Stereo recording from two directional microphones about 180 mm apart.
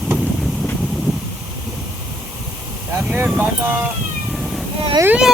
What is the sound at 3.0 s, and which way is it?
Speech, 5° right (ahead or behind).